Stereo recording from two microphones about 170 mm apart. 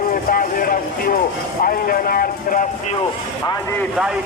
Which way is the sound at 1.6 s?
60° left (ahead or behind).